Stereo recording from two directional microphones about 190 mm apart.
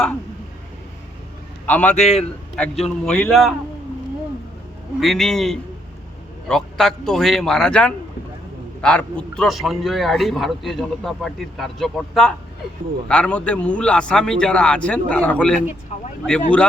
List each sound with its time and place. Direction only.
1.6 s a man's voice: 10° left (ahead or behind)
2.0 s a man's voice: 30° left (ahead or behind)
2.6 s a man's voice: 5° left (ahead or behind)
4.9 s a man's voice: centre (ahead or behind)
15.9 s a man's voice: 35° left (ahead or behind)